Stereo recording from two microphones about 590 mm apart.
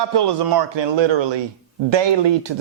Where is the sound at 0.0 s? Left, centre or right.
Right.